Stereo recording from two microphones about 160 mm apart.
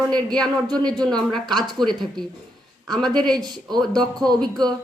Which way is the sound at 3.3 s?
25° right (ahead or behind).